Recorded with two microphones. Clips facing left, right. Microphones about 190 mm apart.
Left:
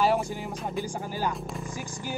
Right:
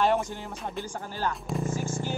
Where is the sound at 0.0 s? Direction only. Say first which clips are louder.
Even; 5° left (ahead or behind).